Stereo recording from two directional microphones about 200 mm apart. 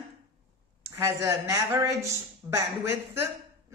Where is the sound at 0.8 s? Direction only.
15° right (ahead or behind).